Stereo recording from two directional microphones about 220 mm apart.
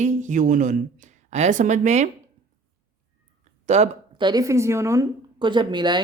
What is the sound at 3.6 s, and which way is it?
Speech, 30° right (ahead or behind).